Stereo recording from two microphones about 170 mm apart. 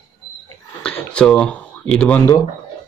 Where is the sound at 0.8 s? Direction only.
5° left (ahead or behind).